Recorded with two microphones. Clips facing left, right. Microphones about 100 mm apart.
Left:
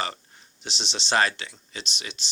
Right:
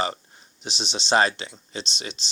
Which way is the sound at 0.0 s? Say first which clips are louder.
Right 4 dB; 20° right (ahead or behind).